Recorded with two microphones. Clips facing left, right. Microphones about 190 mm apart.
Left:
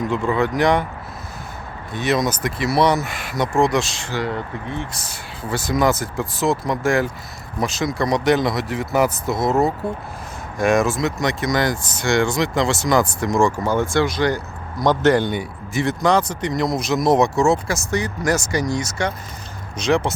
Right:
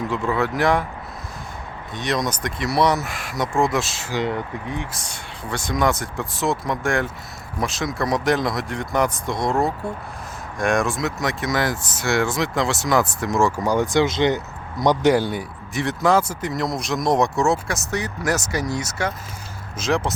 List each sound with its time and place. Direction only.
0.1 s speech: centre (ahead or behind)
1.9 s speech: 5° left (ahead or behind)
4.1 s speech: 15° right (ahead or behind)
4.9 s speech: centre (ahead or behind)
13.6 s speech: 15° right (ahead or behind)
14.8 s speech: 10° right (ahead or behind)